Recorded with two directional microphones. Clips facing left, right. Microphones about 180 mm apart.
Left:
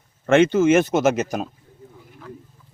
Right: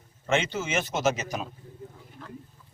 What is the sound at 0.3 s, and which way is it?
Speech, 55° left (ahead or behind).